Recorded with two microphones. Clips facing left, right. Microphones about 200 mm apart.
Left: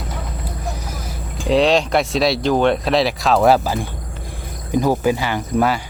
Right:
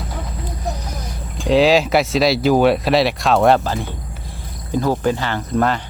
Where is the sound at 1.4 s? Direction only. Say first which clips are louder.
Right 2 dB; centre (ahead or behind).